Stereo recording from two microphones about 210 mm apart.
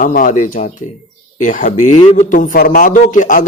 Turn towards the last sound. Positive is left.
turn(degrees=35)  # may be behind; listen again after turning